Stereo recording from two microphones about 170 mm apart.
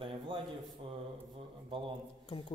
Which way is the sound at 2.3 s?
30° left (ahead or behind).